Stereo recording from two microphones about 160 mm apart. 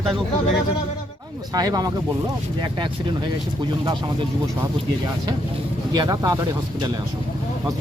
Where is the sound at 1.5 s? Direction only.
25° right (ahead or behind).